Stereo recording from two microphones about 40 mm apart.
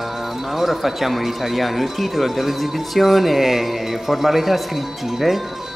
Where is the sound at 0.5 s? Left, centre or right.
Centre.